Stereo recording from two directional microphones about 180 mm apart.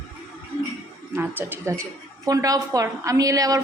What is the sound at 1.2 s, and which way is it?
A woman's voice, 10° right (ahead or behind).